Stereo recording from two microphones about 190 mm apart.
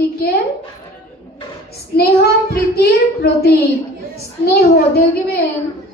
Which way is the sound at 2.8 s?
55° left (ahead or behind).